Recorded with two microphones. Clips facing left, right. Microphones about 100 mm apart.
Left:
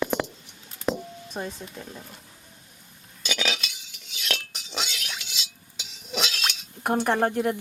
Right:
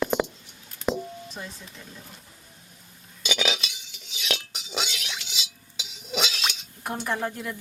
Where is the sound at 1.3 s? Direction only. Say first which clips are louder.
Left 6 dB; 55° left (ahead or behind).